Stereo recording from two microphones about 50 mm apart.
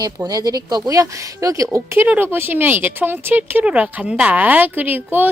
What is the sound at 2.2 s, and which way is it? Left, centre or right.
Speech, right.